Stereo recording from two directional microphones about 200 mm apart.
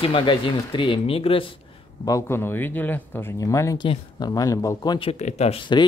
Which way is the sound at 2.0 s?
15° left (ahead or behind).